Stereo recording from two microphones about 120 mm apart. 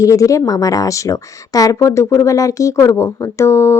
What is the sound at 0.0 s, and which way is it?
Speech, 25° left (ahead or behind).